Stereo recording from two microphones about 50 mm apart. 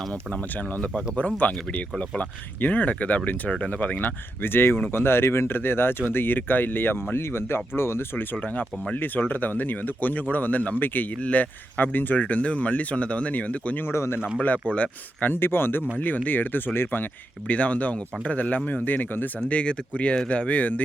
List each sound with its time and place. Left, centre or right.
0.5 s speech: left
4.4 s speech: left
8.4 s speech: left
9.0 s speech: left
13.9 s speech: left
14.3 s speech: left
15.2 s speech: left
16.0 s speech: left
17.5 s speech: left
19.5 s speech: left